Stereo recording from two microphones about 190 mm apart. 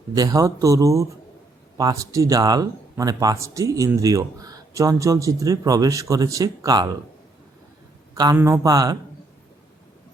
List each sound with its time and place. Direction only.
0.1 s speech: 20° right (ahead or behind)
8.1 s a man's voice: 20° right (ahead or behind)